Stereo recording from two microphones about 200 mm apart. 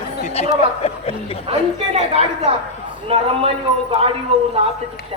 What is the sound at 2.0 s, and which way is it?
Speech, 30° right (ahead or behind).